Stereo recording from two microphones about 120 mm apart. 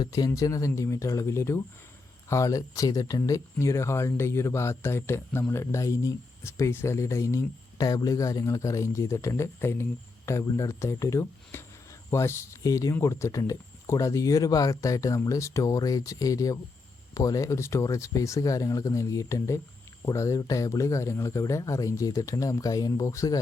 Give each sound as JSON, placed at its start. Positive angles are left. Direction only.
{"t": 0.0, "sound": "speech", "side_deg": 30}